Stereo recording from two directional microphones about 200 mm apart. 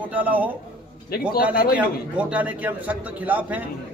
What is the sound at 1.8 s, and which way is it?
A man's voice, 5° right (ahead or behind).